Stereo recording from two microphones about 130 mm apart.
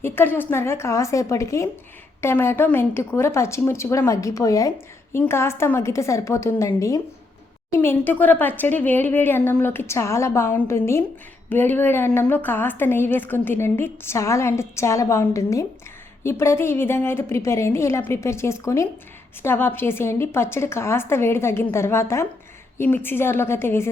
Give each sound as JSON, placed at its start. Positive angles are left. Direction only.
{"t": 0.0, "sound": "a woman's voice", "side_deg": 15}